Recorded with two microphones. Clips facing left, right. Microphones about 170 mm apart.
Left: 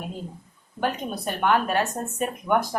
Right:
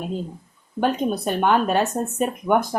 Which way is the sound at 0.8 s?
25° right (ahead or behind).